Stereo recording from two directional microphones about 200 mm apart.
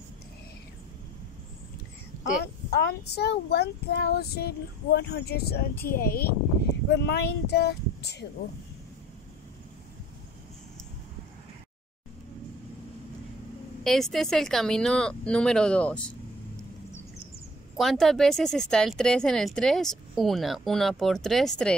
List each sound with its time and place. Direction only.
2.4 s speech: 55° left (ahead or behind)
13.8 s speech: centre (ahead or behind)
17.7 s speech: centre (ahead or behind)